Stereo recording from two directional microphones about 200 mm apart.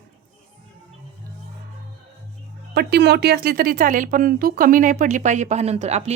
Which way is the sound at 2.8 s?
55° right (ahead or behind).